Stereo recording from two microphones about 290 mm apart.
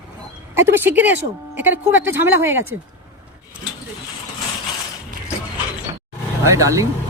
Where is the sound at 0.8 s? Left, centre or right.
Centre.